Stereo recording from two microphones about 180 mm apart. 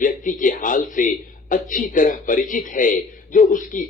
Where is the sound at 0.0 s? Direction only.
45° left (ahead or behind).